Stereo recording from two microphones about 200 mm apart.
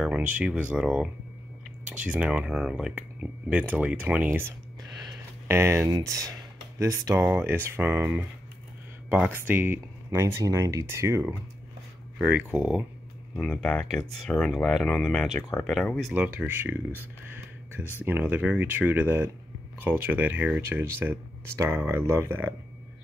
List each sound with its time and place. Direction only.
0.0 s speech: 5° right (ahead or behind)
5.5 s speech: 10° right (ahead or behind)
12.3 s speech: 10° right (ahead or behind)
13.4 s speech: 5° left (ahead or behind)
18.0 s speech: 10° right (ahead or behind)